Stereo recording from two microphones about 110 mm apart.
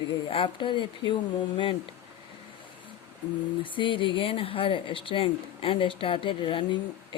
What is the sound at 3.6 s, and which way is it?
Speech, 50° left (ahead or behind).